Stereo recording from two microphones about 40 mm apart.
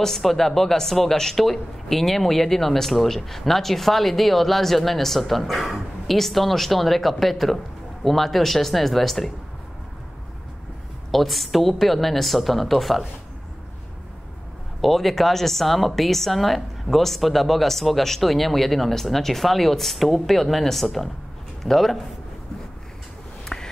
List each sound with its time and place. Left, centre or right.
0.0 s a woman's voice: centre
11.1 s a woman's voice: centre
14.8 s a woman's voice: centre
23.5 s a sound: centre